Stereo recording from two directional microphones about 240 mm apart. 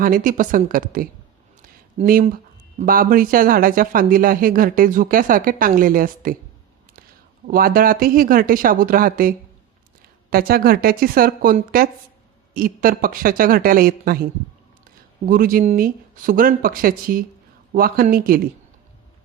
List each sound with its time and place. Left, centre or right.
0.0 s speech: right
7.4 s speech: right
15.3 s speech: right